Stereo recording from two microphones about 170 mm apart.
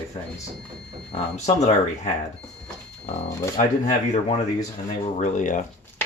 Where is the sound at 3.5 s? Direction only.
40° left (ahead or behind).